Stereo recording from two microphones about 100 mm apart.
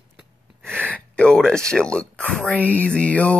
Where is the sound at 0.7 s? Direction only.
15° left (ahead or behind).